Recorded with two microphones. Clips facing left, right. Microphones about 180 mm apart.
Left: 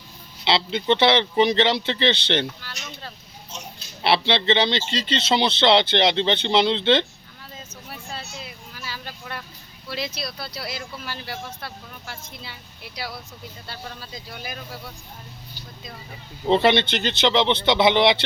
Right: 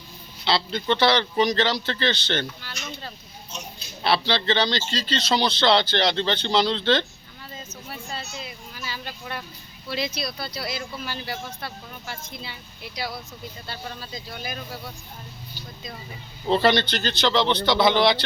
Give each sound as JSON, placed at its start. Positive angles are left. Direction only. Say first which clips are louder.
{"t": 0.4, "sound": "speech", "louder": "left 2 dB", "side_deg": 25}
{"t": 4.0, "sound": "speech", "louder": "left 2 dB", "side_deg": 25}
{"t": 7.9, "sound": "a sound", "louder": "right 1 dB", "side_deg": 5}
{"t": 9.9, "sound": "speech", "louder": "right 2 dB", "side_deg": 5}
{"t": 13.7, "sound": "speech", "louder": "right 1 dB", "side_deg": 5}
{"t": 16.5, "sound": "speech", "louder": "left 2 dB", "side_deg": 25}